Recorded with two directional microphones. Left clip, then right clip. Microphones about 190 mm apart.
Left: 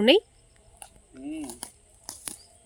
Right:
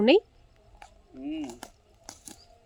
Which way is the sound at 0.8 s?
20° left (ahead or behind).